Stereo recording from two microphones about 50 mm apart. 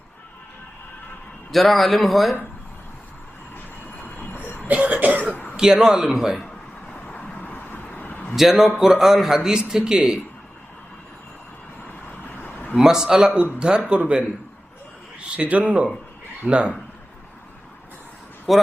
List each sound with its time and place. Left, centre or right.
1.5 s speech: centre
4.4 s throat clearing: left
4.7 s cough: right
5.3 s throat clearing: left
5.5 s a man's voice: centre
7.4 s vehicle: left
8.4 s a man's voice: centre
12.3 s vehicle: left
12.7 s a man's voice: centre
15.4 s speech: right
18.5 s speech: centre